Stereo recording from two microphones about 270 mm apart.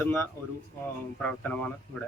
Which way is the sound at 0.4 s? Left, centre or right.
Centre.